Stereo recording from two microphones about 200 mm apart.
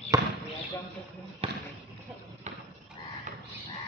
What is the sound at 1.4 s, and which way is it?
Basketball bounce, 30° right (ahead or behind).